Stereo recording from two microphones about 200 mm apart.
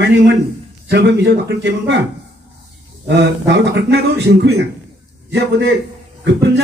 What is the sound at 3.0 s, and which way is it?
Speech, 60° right (ahead or behind).